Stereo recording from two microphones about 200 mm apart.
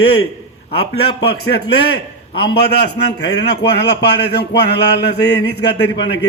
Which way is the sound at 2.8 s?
55° left (ahead or behind).